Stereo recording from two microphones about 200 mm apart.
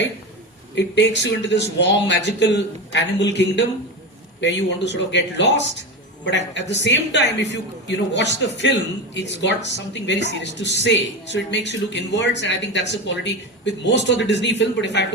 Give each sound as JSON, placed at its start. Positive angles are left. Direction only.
{"t": 0.8, "sound": "a woman's voice", "side_deg": 60}